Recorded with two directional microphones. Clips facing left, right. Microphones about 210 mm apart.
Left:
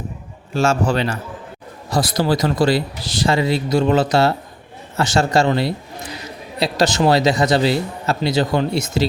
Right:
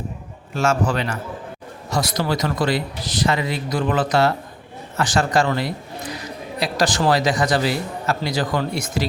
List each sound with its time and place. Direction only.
0.5 s a man's voice: 30° left (ahead or behind)